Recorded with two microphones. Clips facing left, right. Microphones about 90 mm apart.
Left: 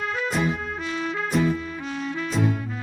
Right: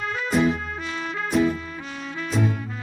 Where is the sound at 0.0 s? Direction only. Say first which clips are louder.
Right 3 dB; centre (ahead or behind).